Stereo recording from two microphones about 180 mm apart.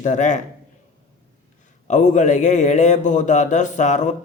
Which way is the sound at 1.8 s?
45° left (ahead or behind).